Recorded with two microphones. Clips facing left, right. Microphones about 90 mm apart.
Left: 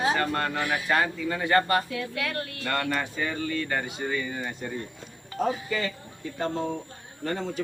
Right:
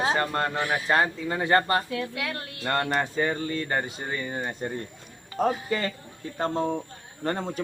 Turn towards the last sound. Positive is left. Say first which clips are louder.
# right 1 dB
turn(degrees=-40)  # may be behind; listen again after turning